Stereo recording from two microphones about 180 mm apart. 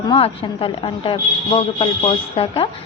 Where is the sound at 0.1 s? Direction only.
30° left (ahead or behind).